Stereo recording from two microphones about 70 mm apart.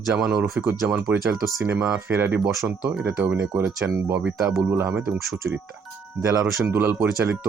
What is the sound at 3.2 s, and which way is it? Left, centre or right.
Speech, centre.